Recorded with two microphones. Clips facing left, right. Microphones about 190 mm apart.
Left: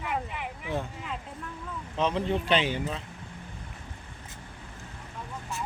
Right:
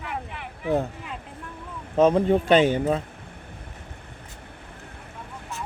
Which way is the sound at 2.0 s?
45° right (ahead or behind).